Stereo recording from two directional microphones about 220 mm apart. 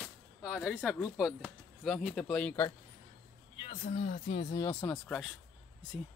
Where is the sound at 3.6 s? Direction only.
30° left (ahead or behind).